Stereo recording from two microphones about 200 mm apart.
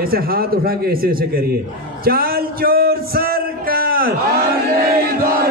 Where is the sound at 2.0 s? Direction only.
50° right (ahead or behind).